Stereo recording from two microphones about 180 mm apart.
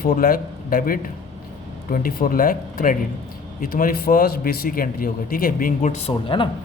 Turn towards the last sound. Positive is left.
turn(degrees=30)  # may be behind; listen again after turning